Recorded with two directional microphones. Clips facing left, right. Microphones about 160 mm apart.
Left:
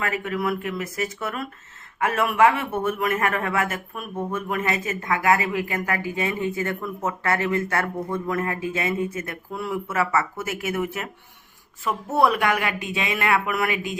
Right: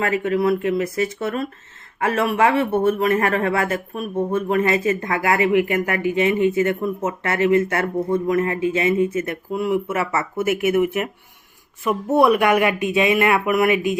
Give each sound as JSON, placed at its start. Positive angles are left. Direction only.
{"t": 0.0, "sound": "a man's voice", "side_deg": -30}
{"t": 5.5, "sound": "speech", "side_deg": 30}
{"t": 6.4, "sound": "speech", "side_deg": -20}
{"t": 11.8, "sound": "speech", "side_deg": -15}